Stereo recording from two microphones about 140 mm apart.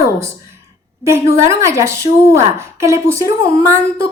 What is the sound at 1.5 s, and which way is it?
A woman's voice, 20° right (ahead or behind).